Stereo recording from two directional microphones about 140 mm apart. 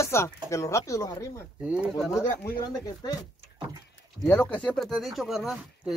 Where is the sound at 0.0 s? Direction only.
20° left (ahead or behind).